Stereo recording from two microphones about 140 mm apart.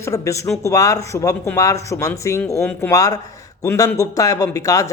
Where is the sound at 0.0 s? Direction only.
20° left (ahead or behind).